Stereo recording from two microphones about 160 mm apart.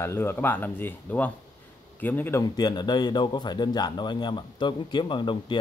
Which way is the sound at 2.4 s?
25° left (ahead or behind).